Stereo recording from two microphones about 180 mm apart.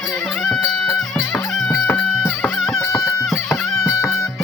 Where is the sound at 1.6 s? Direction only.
10° left (ahead or behind).